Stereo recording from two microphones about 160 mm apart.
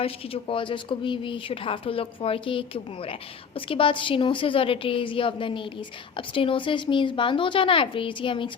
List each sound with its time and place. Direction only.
0.0 s speech: 35° left (ahead or behind)